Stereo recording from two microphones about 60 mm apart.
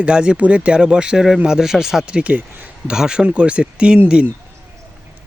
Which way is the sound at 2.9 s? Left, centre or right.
Centre.